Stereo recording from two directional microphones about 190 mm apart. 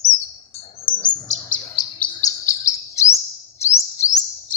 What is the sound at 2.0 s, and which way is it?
Chirp, 15° left (ahead or behind).